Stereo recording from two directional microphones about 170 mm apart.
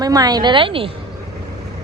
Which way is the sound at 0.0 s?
20° right (ahead or behind).